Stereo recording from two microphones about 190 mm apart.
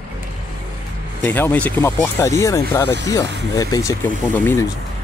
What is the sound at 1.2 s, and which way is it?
Speech, 10° left (ahead or behind).